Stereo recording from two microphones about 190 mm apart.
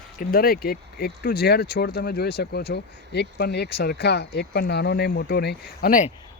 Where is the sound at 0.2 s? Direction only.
50° left (ahead or behind).